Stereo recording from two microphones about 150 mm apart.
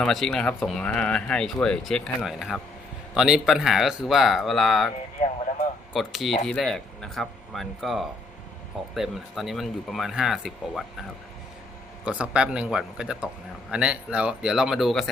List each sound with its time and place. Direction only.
0.0 s speech: centre (ahead or behind)
5.2 s speech: 65° left (ahead or behind)
5.9 s speech: centre (ahead or behind)
12.0 s a man's voice: 10° right (ahead or behind)